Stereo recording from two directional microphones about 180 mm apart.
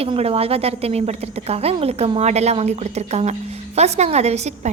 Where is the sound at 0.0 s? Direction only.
35° right (ahead or behind).